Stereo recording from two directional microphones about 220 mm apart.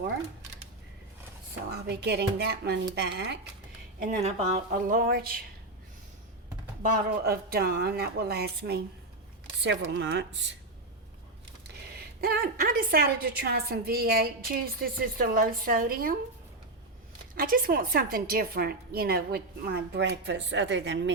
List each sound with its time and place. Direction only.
1.7 s a woman's voice: 50° right (ahead or behind)
4.1 s a woman's voice: 30° right (ahead or behind)
4.9 s a woman's voice: 40° right (ahead or behind)
6.8 s a woman's voice: 40° right (ahead or behind)
11.9 s a woman's voice: 45° right (ahead or behind)
17.3 s a woman's voice: 40° right (ahead or behind)